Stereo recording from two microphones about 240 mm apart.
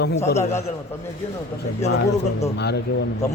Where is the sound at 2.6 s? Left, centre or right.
Left.